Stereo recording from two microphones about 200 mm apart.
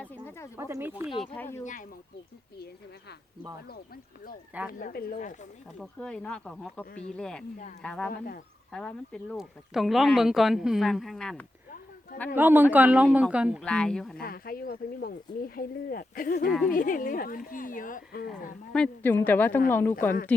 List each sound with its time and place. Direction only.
0.0 s snake: 10° left (ahead or behind)
0.5 s a woman's voice: 10° right (ahead or behind)
1.2 s a woman's voice: 10° left (ahead or behind)
1.6 s speech: 40° left (ahead or behind)
4.8 s speech: 45° left (ahead or behind)
5.8 s speech: 5° left (ahead or behind)
8.1 s speech: 45° left (ahead or behind)
8.7 s speech: 5° left (ahead or behind)
12.4 s a woman's voice: 10° right (ahead or behind)
13.7 s speech: 5° left (ahead or behind)
14.2 s speech: 50° left (ahead or behind)
16.5 s speech: centre (ahead or behind)
16.7 s speech: 45° left (ahead or behind)
18.7 s a woman's voice: 5° left (ahead or behind)